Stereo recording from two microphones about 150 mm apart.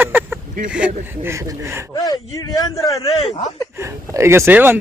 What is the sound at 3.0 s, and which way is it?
Speech, 40° left (ahead or behind).